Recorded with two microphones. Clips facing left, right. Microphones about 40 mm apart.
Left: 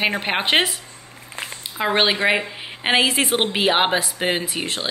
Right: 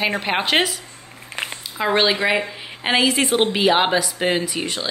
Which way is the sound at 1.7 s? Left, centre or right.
Centre.